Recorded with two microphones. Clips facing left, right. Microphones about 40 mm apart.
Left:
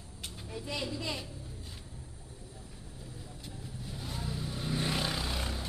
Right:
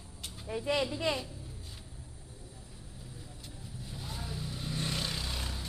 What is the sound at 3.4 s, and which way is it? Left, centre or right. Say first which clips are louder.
Vehicle: left 3 dB; centre.